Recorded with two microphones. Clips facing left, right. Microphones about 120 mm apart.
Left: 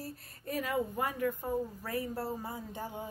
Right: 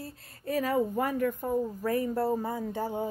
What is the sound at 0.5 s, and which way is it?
Speech, 35° right (ahead or behind).